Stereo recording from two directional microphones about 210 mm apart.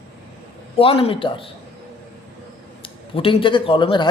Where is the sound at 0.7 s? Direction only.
25° left (ahead or behind).